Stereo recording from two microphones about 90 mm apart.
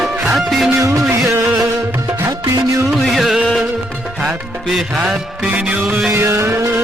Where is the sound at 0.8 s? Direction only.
35° right (ahead or behind).